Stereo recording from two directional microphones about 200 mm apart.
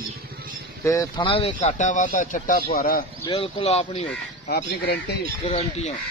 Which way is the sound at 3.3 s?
30° left (ahead or behind).